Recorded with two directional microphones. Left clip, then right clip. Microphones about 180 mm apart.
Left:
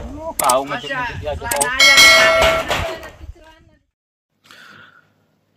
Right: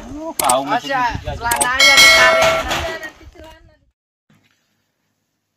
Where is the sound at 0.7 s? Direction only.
35° right (ahead or behind).